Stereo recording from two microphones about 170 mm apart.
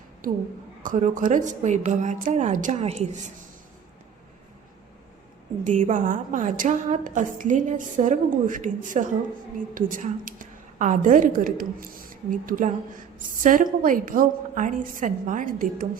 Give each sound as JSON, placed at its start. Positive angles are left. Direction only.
{"t": 0.9, "sound": "a woman's voice", "side_deg": -50}
{"t": 5.6, "sound": "a woman's voice", "side_deg": -50}